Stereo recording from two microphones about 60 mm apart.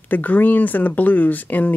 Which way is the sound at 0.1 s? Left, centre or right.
Left.